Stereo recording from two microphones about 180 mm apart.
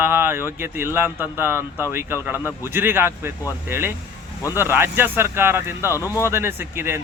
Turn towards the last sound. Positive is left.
turn(degrees=-15)  # may be behind; listen again after turning